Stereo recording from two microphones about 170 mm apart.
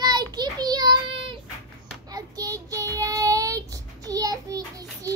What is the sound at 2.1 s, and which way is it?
Child singing, 20° right (ahead or behind).